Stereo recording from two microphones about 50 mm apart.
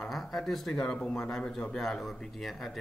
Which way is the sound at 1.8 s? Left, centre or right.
Centre.